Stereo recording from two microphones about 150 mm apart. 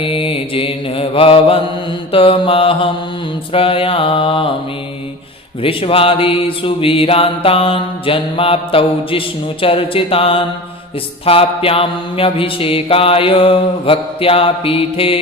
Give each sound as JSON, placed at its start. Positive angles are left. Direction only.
{"t": 0.0, "sound": "mantra", "side_deg": 35}
{"t": 5.6, "sound": "mantra", "side_deg": 40}